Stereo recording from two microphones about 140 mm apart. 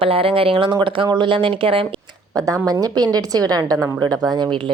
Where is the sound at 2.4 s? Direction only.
25° right (ahead or behind).